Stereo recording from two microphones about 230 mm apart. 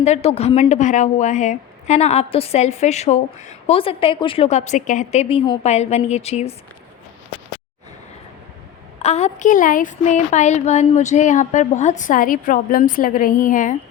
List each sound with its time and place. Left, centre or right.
0.0 s a woman's voice: left
9.0 s a woman's voice: left